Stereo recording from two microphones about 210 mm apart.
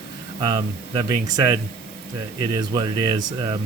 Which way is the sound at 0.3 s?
20° right (ahead or behind).